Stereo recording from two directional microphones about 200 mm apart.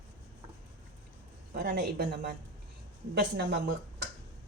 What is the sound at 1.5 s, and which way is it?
Speech, 50° right (ahead or behind).